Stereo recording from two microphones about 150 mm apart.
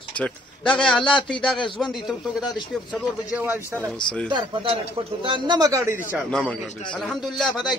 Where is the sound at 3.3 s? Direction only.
15° right (ahead or behind).